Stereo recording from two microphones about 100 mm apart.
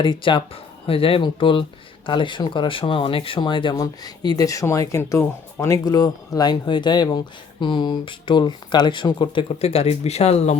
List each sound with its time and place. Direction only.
0.0 s speech: 55° left (ahead or behind)
3.8 s speech: 40° left (ahead or behind)
9.6 s speech: 90° left